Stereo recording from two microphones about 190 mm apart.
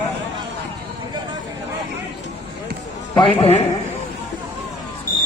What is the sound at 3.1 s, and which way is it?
Speech, 30° left (ahead or behind).